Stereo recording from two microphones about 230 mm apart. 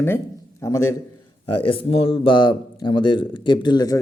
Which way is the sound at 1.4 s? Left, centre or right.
Left.